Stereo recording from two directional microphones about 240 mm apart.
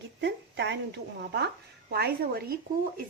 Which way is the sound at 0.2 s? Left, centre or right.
Right.